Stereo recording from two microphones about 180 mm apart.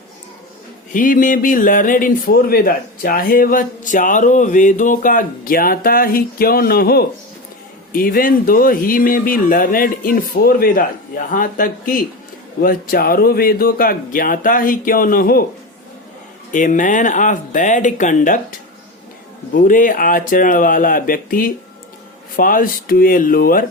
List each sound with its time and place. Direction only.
0.9 s speech: 45° left (ahead or behind)
16.5 s speech: 45° left (ahead or behind)
19.5 s speech: 45° left (ahead or behind)